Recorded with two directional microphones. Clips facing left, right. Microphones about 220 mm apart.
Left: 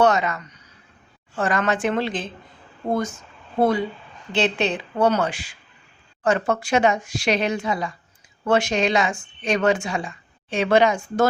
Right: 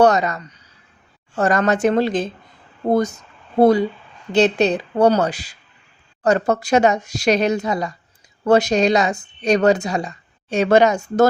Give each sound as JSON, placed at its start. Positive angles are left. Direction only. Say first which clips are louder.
{"t": 0.0, "sound": "speech", "louder": "right 4 dB", "side_deg": -40}